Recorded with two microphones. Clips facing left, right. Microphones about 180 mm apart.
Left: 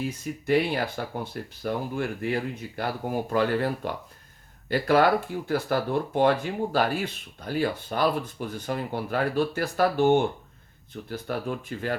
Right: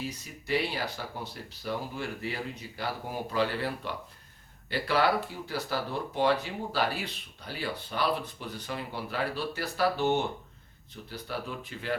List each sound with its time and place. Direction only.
0.0 s speech: 50° left (ahead or behind)